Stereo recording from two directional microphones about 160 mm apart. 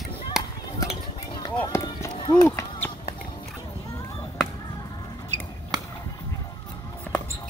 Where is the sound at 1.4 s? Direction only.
25° left (ahead or behind).